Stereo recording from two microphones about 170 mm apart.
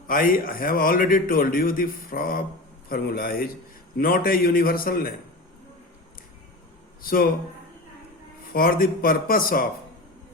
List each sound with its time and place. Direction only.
0.1 s a man's voice: 55° left (ahead or behind)
7.0 s speech: 60° left (ahead or behind)
8.5 s a man's voice: 55° left (ahead or behind)